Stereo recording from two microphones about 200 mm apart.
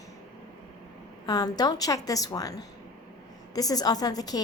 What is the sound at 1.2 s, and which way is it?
A woman's voice, 20° left (ahead or behind).